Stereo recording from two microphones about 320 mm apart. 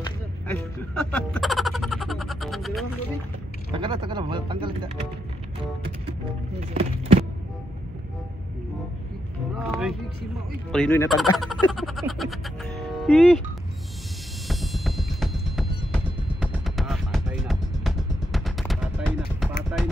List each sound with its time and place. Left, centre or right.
0.6 s a sound: centre
3.7 s speech: centre
6.7 s a sound: centre
9.6 s music: centre
10.7 s speech: centre
11.3 s music: centre
14.5 s music: centre